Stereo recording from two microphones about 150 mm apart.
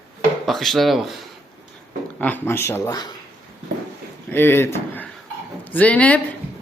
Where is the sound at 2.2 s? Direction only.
10° left (ahead or behind).